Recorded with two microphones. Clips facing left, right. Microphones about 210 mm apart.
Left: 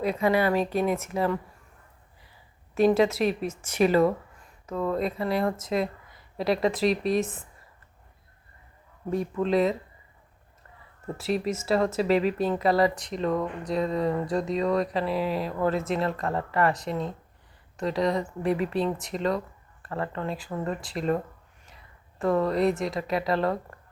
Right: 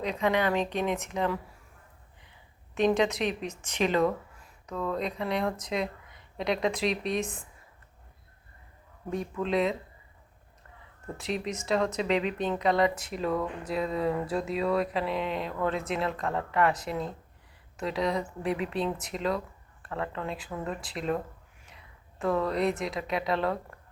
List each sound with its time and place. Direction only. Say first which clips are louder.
0.0 s speech: left 3 dB; 5° left (ahead or behind)
2.7 s a woman's voice: left 4 dB; 5° left (ahead or behind)
9.0 s speech: left 4 dB; centre (ahead or behind)
11.2 s speech: left 5 dB; 5° left (ahead or behind)
21.7 s a sound: even; centre (ahead or behind)
22.8 s speech: left 3 dB; centre (ahead or behind)